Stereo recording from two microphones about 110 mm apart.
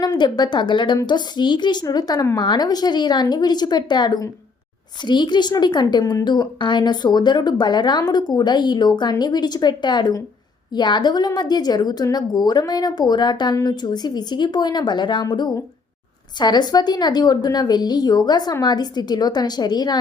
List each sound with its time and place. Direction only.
0.0 s a woman's voice: 40° left (ahead or behind)